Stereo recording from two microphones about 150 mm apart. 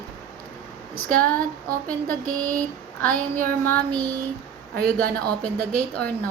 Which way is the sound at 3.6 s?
10° left (ahead or behind).